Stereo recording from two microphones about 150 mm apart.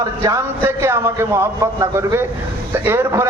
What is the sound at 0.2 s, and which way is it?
A man's voice, 20° right (ahead or behind).